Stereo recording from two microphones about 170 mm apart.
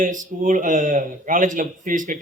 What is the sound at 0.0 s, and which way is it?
Speech, 50° right (ahead or behind).